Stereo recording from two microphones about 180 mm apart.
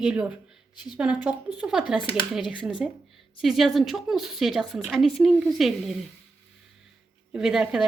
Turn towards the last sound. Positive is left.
turn(degrees=-5)  # may be behind; listen again after turning